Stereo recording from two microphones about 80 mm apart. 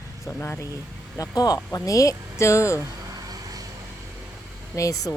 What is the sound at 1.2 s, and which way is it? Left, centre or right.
Speech, left.